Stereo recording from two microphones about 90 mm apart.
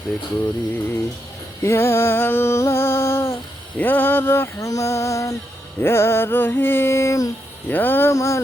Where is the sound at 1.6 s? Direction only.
30° left (ahead or behind).